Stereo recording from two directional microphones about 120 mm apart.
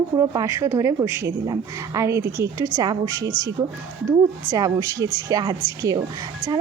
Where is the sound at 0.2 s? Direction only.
25° right (ahead or behind).